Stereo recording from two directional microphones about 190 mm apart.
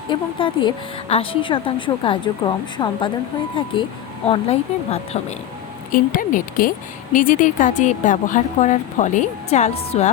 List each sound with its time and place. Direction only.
0.1 s a woman's voice: 25° left (ahead or behind)
5.9 s speech: 45° left (ahead or behind)